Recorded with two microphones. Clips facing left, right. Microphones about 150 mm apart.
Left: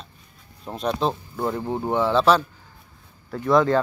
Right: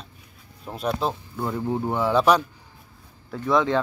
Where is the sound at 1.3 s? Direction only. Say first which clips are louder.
Left 1 dB; 25° left (ahead or behind).